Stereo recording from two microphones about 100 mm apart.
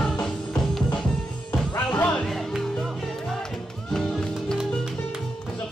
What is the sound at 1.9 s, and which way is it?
Music, 15° left (ahead or behind).